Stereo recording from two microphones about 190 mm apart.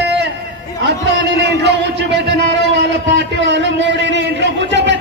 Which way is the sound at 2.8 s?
70° right (ahead or behind).